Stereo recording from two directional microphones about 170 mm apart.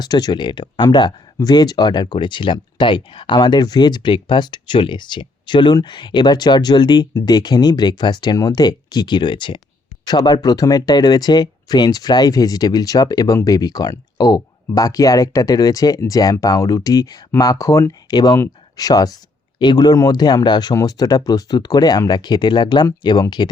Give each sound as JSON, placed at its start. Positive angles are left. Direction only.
{"t": 0.0, "sound": "speech", "side_deg": 25}